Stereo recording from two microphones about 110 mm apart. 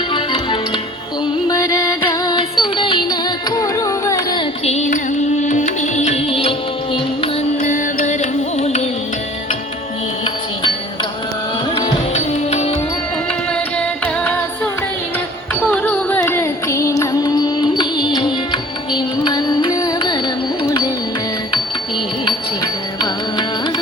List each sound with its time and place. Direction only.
0.1 s music: 50° left (ahead or behind)
1.5 s music: 30° left (ahead or behind)
4.6 s carnatic music: 85° left
5.4 s music: 90° left; by 6.5 s 60° left (ahead or behind)
8.5 s music: 75° left (ahead or behind)
12.1 s music: 80° left
13.7 s music: 10° left (ahead or behind)
15.7 s music: 15° left (ahead or behind); by 19.9 s 35° left (ahead or behind)